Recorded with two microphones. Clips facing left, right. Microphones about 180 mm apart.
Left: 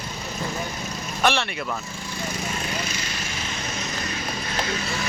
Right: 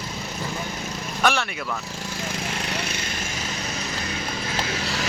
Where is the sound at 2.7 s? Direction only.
65° right (ahead or behind).